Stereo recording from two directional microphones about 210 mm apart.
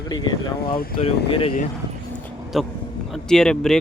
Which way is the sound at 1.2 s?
25° left (ahead or behind).